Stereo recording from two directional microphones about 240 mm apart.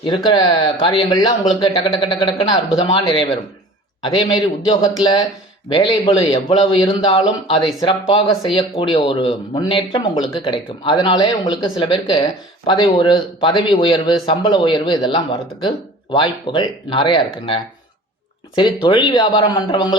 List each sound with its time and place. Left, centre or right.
0.3 s speech: centre